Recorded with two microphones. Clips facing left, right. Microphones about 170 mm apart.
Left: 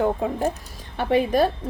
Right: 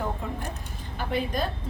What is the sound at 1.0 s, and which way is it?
Speech, 70° left (ahead or behind).